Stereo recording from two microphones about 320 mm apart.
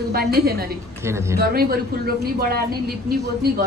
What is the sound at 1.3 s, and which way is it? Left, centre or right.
A woman's voice, right.